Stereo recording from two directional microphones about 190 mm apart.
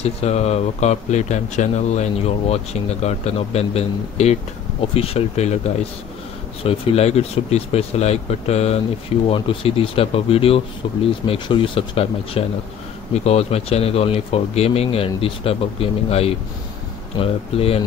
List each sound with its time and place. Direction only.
0.0 s speech: 35° left (ahead or behind)
6.6 s speech: 30° left (ahead or behind)